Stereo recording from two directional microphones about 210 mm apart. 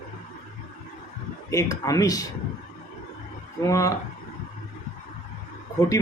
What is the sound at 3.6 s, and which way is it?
Speech, 15° left (ahead or behind).